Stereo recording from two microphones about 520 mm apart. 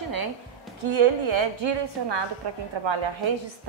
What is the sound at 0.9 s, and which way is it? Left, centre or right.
A woman's voice, right.